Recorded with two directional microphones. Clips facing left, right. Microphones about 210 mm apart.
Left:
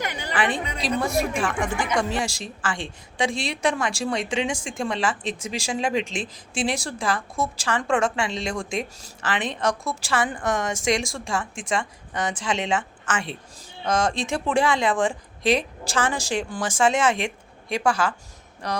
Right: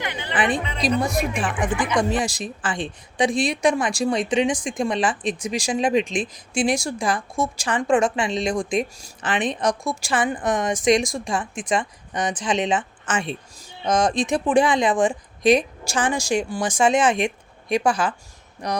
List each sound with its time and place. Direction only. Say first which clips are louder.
0.0 s music: even; 40° left (ahead or behind)
0.3 s a woman's voice: right 3 dB; 20° right (ahead or behind)